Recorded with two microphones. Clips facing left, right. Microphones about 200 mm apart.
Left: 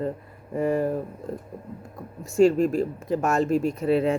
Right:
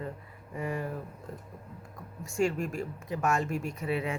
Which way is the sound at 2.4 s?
35° left (ahead or behind).